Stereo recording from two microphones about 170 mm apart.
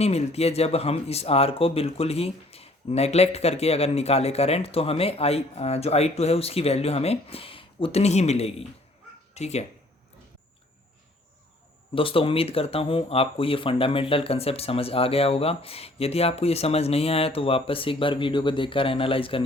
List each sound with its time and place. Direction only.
0.0 s speech: 40° left (ahead or behind)
11.9 s speech: 30° left (ahead or behind)